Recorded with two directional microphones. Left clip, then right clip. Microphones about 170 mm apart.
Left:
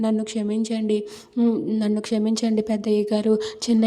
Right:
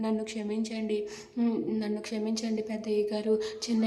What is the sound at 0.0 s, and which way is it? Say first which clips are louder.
Speech: left 8 dB; 40° left (ahead or behind).